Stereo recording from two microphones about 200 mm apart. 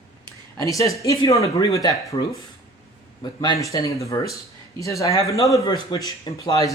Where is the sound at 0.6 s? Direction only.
15° left (ahead or behind).